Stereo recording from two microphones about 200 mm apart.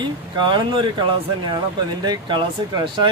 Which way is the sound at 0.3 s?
20° right (ahead or behind).